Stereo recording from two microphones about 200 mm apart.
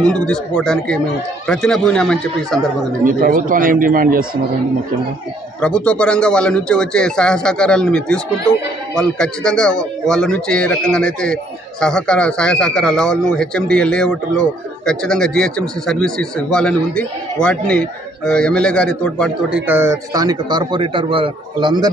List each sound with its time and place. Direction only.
0.0 s speech: 5° left (ahead or behind)
3.1 s speech: 45° right (ahead or behind)
5.6 s speech: 5° left (ahead or behind)
19.6 s a man's voice: 10° right (ahead or behind)